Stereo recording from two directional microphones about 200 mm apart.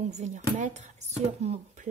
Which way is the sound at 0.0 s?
35° right (ahead or behind).